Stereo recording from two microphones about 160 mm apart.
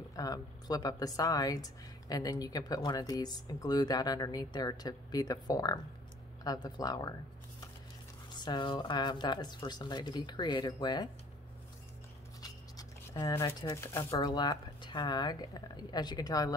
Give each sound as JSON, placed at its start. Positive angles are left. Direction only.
{"t": 0.1, "sound": "speech", "side_deg": 20}
{"t": 8.4, "sound": "speech", "side_deg": 30}
{"t": 12.4, "sound": "speech", "side_deg": 25}